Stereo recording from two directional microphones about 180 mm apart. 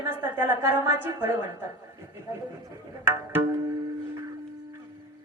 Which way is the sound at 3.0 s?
15° right (ahead or behind).